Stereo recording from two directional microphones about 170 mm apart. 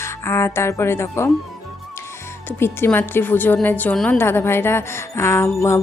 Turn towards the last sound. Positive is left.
turn(degrees=15)  # may be behind; listen again after turning